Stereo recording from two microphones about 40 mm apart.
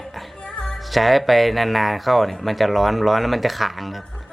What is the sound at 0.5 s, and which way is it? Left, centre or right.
Music, centre.